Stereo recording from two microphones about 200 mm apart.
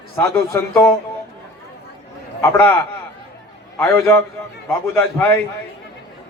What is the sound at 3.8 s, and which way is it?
A man's voice, 10° left (ahead or behind).